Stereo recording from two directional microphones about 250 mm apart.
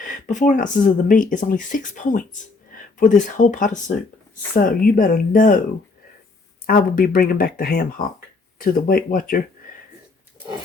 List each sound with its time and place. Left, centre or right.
0.0 s speech: left
6.7 s speech: left